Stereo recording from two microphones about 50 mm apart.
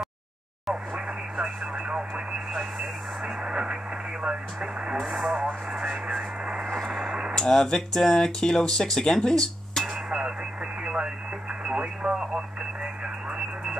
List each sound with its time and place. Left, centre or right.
0.9 s speech: right
4.9 s speech: centre
5.3 s speech: centre
6.7 s speech: centre
7.1 s a sound: right
7.3 s speech: centre
10.0 s radio: centre
11.6 s speech: centre
12.2 s radio: centre